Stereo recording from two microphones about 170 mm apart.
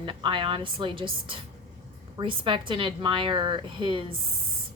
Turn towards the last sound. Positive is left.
turn(degrees=-30)  # may be behind; listen again after turning